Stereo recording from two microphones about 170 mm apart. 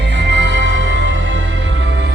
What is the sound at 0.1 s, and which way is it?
Music, 90° right.